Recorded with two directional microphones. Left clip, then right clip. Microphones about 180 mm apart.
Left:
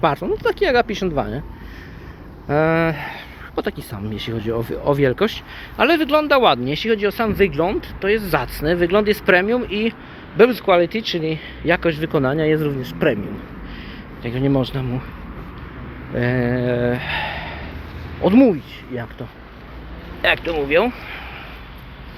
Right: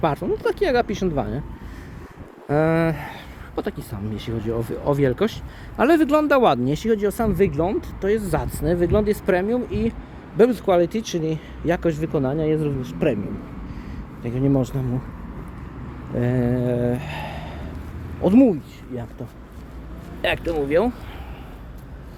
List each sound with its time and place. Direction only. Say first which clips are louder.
0.0 s speech: left 3 dB; 25° right (ahead or behind)
2.5 s speech: left 3 dB; 10° right (ahead or behind)
2.7 s speech: left 3 dB; 30° right (ahead or behind)
3.5 s speech: left 4 dB; 10° right (ahead or behind)
5.7 s speech: left 1 dB; 55° right (ahead or behind); by 7.2 s 40° right (ahead or behind)
7.3 s speech: left 3 dB; 20° right (ahead or behind)
12.1 s speech: left 6 dB; centre (ahead or behind)
14.2 s speech: left 2 dB; 20° right (ahead or behind)
16.1 s speech: left 3 dB; 20° right (ahead or behind)
20.2 s speech: left 4 dB; 40° right (ahead or behind)